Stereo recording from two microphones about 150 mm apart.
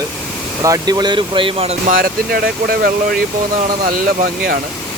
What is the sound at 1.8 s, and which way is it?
Speech, 70° right (ahead or behind).